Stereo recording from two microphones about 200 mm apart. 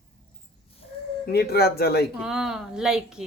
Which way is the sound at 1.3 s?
55° left (ahead or behind).